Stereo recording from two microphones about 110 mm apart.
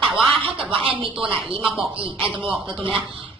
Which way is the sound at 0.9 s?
50° right (ahead or behind).